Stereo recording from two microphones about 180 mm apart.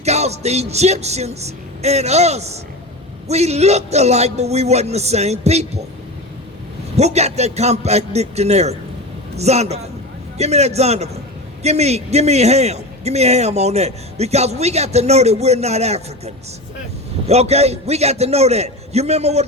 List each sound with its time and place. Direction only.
0.0 s a man's voice: 35° right (ahead or behind)
6.9 s a man's voice: 35° right (ahead or behind)